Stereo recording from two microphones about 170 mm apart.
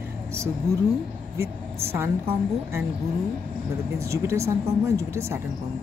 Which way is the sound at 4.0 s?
15° right (ahead or behind).